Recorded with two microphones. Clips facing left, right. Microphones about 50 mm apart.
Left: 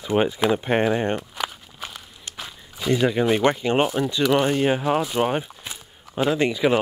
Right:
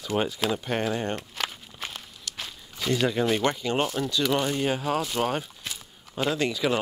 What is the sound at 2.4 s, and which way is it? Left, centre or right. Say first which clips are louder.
Speech: left 2 dB; centre.